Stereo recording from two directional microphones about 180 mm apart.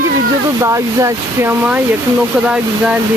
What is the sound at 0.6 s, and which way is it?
Speech, 15° right (ahead or behind).